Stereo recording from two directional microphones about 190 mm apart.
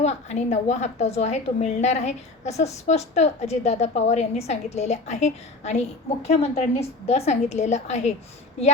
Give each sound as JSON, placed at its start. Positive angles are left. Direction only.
{"t": 0.0, "sound": "a woman's voice", "side_deg": 35}